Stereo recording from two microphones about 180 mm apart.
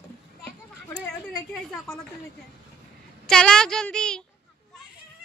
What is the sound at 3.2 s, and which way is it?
Speech, 5° left (ahead or behind).